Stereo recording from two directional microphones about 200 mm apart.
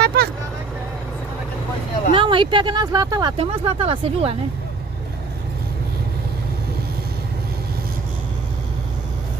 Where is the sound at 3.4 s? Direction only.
30° right (ahead or behind).